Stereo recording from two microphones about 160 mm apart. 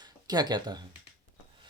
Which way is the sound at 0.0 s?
25° right (ahead or behind).